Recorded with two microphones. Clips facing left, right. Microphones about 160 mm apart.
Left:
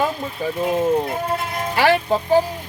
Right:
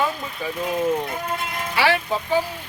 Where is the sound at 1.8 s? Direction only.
45° left (ahead or behind).